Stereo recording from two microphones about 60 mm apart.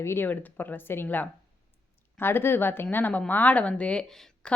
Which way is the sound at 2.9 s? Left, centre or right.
Left.